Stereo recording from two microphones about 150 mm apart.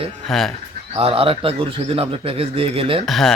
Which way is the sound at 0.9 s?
40° right (ahead or behind).